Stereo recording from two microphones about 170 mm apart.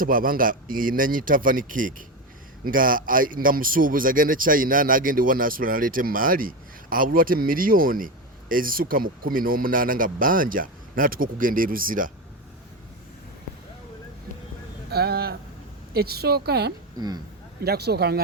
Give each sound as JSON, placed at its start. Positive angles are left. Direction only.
{"t": 0.0, "sound": "speech", "side_deg": -55}
{"t": 14.8, "sound": "a sound", "side_deg": -70}
{"t": 15.9, "sound": "a woman's voice", "side_deg": -65}